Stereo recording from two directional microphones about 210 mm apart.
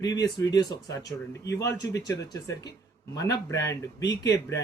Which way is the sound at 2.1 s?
15° left (ahead or behind).